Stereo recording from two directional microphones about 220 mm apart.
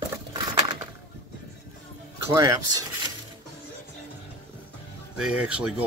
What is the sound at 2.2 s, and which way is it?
Speech, 15° right (ahead or behind).